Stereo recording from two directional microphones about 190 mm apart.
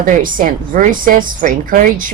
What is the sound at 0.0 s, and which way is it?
A woman's voice, 45° right (ahead or behind).